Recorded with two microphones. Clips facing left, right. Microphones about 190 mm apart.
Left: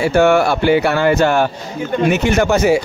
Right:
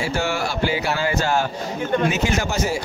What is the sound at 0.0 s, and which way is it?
Speech, 60° left (ahead or behind).